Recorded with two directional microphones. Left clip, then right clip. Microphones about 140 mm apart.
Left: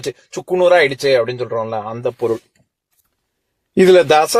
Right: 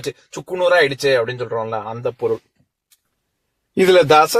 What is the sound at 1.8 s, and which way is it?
Speech, 35° left (ahead or behind).